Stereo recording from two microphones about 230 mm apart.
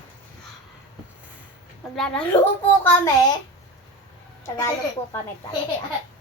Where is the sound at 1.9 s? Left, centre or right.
Centre.